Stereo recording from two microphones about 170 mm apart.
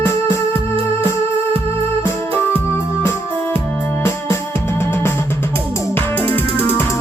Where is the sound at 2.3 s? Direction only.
15° left (ahead or behind).